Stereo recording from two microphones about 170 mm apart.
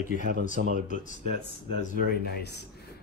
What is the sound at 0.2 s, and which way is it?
Speech, 60° right (ahead or behind).